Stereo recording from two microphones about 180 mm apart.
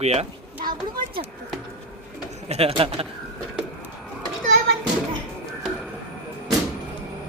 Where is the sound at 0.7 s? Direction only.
50° right (ahead or behind).